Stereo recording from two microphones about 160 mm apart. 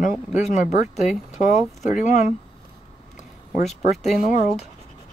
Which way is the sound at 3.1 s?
45° left (ahead or behind).